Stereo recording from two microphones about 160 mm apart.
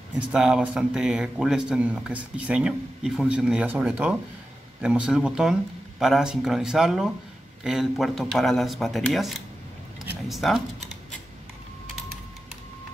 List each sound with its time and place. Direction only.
0.3 s speech: 5° right (ahead or behind)